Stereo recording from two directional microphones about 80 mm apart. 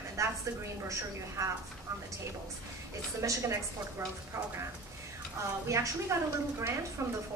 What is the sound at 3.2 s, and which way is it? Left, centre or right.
Speech, right.